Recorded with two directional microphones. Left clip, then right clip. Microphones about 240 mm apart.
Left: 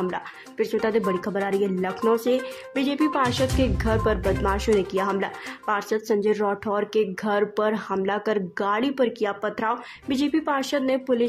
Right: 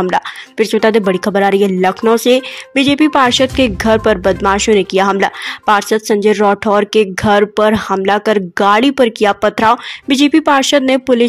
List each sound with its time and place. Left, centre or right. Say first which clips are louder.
0.0 s speech: right 14 dB; right